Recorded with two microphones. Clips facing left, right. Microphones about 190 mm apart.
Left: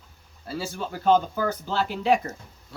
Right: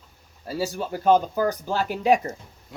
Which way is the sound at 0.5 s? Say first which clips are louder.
Right 5 dB; 40° right (ahead or behind).